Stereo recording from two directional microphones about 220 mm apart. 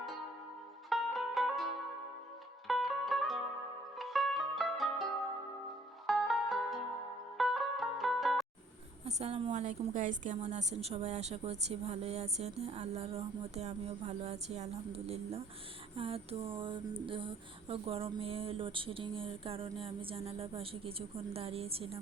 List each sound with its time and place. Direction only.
0.9 s music: centre (ahead or behind)
2.6 s music: centre (ahead or behind)
6.1 s music: centre (ahead or behind)
9.0 s a woman's voice: 30° right (ahead or behind)